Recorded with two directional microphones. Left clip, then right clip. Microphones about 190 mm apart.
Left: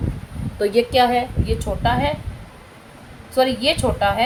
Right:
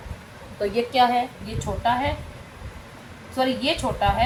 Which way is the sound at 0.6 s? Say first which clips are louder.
Left 4 dB; 65° left (ahead or behind).